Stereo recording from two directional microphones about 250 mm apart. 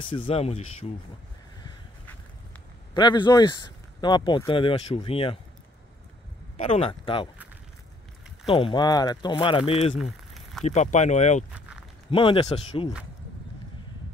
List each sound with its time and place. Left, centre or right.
0.2 s speech: left
2.9 s speech: centre
6.5 s speech: left
8.5 s speech: left
9.9 s a sound: centre
10.6 s speech: left